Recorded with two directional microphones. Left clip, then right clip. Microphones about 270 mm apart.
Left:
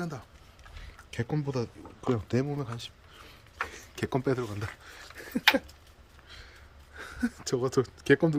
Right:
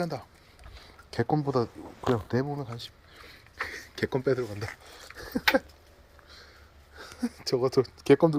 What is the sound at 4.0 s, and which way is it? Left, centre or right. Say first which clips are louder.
Speech: right 2 dB; centre.